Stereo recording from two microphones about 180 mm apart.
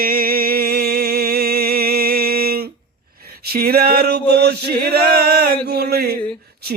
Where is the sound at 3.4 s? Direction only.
55° right (ahead or behind).